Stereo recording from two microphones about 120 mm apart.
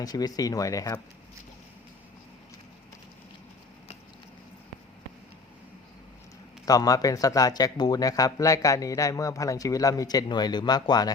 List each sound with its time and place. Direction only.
0.0 s speech: 30° left (ahead or behind)
6.7 s speech: 30° left (ahead or behind)